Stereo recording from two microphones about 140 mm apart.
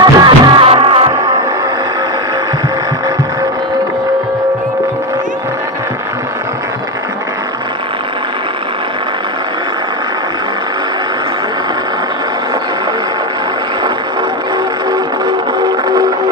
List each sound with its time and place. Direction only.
0.0 s music: 30° right (ahead or behind)